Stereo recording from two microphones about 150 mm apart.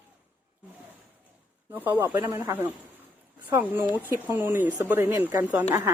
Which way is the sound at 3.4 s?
10° right (ahead or behind).